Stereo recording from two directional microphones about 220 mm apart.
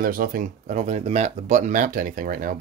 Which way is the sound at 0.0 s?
40° right (ahead or behind).